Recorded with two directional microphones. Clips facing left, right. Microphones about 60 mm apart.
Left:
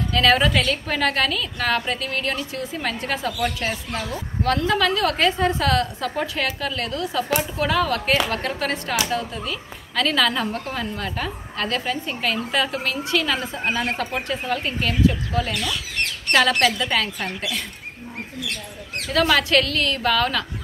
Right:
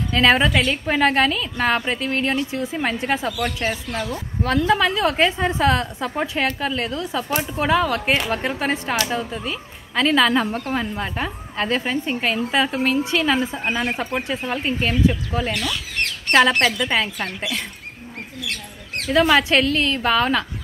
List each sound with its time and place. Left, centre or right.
0.1 s a woman's voice: right
0.5 s a woman's voice: centre
0.8 s a woman's voice: right
4.5 s a woman's voice: centre
13.7 s a woman's voice: centre
13.9 s a woman's voice: centre
19.1 s a woman's voice: right